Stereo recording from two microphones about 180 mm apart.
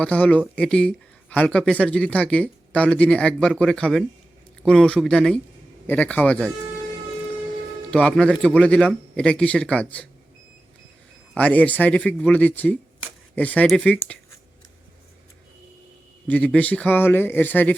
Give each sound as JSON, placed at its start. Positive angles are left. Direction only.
{"t": 0.0, "sound": "speech", "side_deg": 5}
{"t": 7.9, "sound": "speech", "side_deg": 5}
{"t": 11.3, "sound": "speech", "side_deg": 10}
{"t": 16.2, "sound": "speech", "side_deg": 10}